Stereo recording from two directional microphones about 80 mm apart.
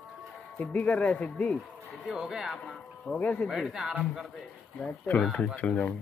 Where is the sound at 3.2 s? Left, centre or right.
Centre.